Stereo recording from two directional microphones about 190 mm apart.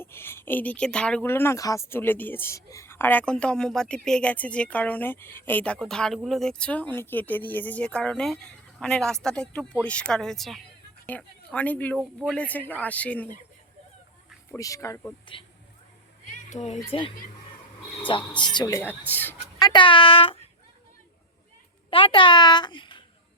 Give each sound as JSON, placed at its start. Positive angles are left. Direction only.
{"t": 0.0, "sound": "a woman's voice", "side_deg": 10}
{"t": 14.5, "sound": "a woman's voice", "side_deg": 15}
{"t": 16.5, "sound": "a woman's voice", "side_deg": 35}
{"t": 21.8, "sound": "a child's voice", "side_deg": 25}